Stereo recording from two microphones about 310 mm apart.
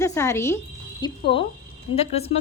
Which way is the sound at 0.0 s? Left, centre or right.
Centre.